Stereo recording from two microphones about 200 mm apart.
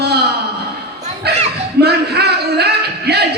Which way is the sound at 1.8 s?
55° right (ahead or behind).